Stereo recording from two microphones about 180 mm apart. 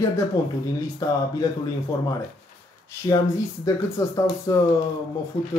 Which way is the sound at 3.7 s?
15° left (ahead or behind).